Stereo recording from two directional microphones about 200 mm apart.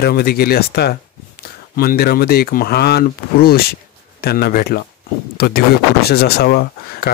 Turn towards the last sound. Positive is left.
turn(degrees=50)  # may be behind; listen again after turning